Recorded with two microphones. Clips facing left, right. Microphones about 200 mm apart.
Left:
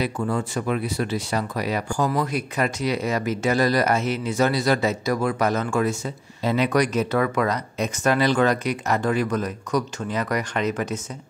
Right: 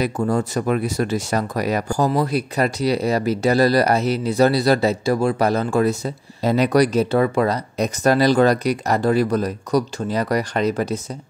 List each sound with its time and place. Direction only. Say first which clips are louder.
0.0 s speech: right 4 dB; 40° right (ahead or behind)